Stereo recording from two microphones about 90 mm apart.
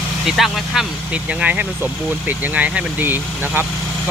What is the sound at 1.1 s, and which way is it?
Speech, 15° right (ahead or behind).